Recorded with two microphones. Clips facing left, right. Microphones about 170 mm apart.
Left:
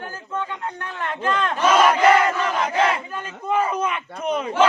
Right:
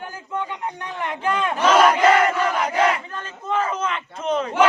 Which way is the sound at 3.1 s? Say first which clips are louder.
Left 2 dB; 10° left (ahead or behind).